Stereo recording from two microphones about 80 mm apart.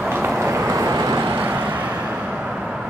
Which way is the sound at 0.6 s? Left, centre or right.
Right.